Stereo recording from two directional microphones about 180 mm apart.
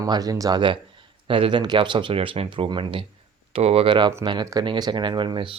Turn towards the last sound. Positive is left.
turn(degrees=-25)  # may be behind; listen again after turning